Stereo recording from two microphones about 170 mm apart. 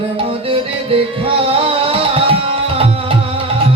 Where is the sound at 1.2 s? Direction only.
35° right (ahead or behind).